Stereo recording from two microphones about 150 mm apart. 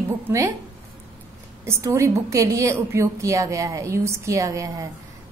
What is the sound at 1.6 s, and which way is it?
A woman's voice, 20° right (ahead or behind).